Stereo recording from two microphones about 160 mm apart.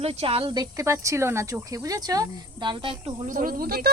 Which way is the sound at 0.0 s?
40° right (ahead or behind).